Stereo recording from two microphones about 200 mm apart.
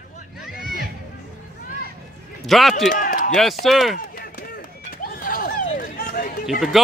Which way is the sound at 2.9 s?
45° left (ahead or behind).